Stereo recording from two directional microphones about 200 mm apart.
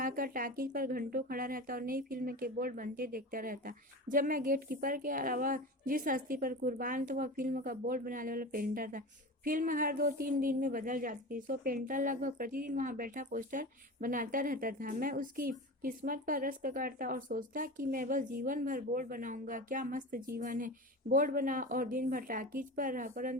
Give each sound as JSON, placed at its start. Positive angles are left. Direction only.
{"t": 0.0, "sound": "speech", "side_deg": -45}